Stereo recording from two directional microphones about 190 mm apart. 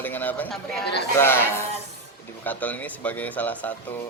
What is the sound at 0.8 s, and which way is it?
Speech, 60° left (ahead or behind).